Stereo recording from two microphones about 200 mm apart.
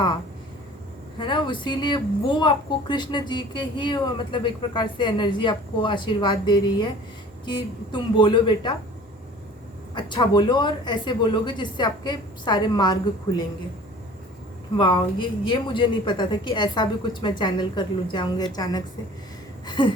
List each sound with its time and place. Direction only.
1.2 s a woman's voice: 25° left (ahead or behind)
9.9 s a woman's voice: 20° left (ahead or behind)
14.8 s a woman's voice: 20° left (ahead or behind)
19.6 s a sound: 20° left (ahead or behind)